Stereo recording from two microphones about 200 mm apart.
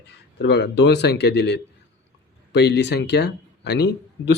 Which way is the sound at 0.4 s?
60° left (ahead or behind).